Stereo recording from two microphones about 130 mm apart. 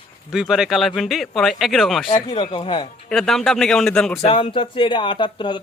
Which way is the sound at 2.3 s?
45° left (ahead or behind).